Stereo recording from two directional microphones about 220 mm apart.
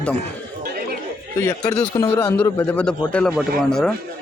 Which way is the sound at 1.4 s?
10° left (ahead or behind).